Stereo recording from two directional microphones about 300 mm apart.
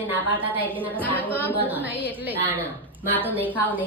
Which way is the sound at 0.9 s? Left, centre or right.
Centre.